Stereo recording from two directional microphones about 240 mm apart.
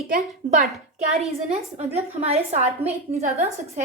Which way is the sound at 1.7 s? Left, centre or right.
Right.